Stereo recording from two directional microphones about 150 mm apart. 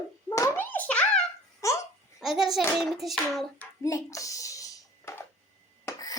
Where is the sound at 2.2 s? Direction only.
Centre (ahead or behind).